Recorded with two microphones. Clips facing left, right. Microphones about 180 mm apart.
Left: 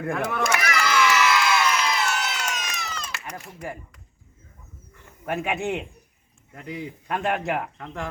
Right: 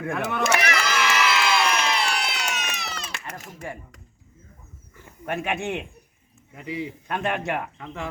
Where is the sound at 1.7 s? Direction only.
70° right (ahead or behind).